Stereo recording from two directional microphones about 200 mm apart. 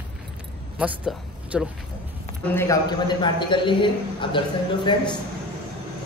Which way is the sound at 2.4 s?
15° left (ahead or behind).